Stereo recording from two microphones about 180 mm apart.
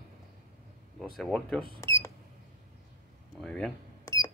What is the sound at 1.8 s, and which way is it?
Cash register, 15° left (ahead or behind).